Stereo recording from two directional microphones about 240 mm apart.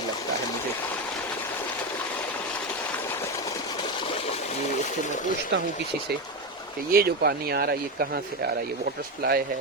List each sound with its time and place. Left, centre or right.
6.9 s speech: right
9.2 s speech: right